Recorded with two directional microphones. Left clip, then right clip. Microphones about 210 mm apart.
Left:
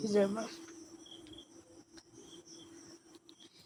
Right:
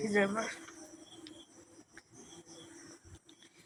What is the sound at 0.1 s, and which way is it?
Speech, 10° left (ahead or behind).